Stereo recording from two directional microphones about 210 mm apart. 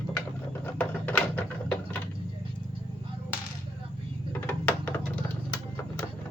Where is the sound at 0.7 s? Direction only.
5° left (ahead or behind).